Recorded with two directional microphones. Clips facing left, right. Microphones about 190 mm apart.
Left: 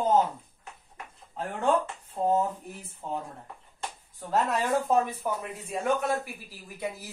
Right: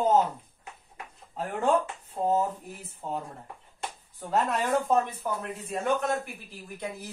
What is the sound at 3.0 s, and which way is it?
Speech, 10° right (ahead or behind).